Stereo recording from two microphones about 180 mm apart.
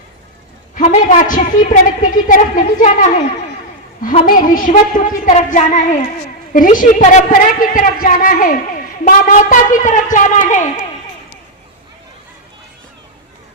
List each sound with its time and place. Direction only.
0.8 s a woman's voice: 45° left (ahead or behind)